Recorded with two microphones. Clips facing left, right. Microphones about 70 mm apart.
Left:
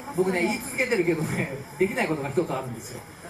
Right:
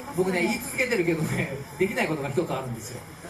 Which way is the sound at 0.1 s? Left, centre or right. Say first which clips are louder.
Left 1 dB; centre.